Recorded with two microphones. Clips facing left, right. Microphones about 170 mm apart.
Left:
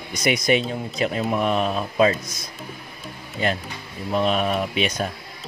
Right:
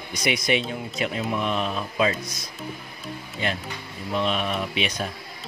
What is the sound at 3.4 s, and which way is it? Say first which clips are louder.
Speech: left 4 dB; 40° left (ahead or behind).